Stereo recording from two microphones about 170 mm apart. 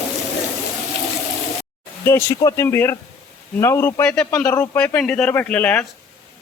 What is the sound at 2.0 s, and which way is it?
Speech, 15° left (ahead or behind).